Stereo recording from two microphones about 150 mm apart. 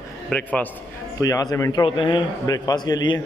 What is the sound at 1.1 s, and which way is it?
Speech, 25° left (ahead or behind).